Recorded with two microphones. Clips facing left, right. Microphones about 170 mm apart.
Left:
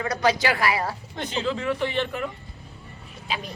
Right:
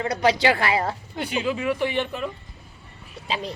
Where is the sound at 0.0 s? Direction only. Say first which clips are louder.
Right 2 dB; 30° right (ahead or behind).